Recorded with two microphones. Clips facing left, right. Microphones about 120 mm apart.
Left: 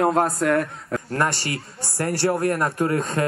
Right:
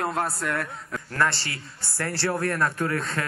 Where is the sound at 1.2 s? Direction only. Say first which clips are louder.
Right 1 dB; 15° left (ahead or behind).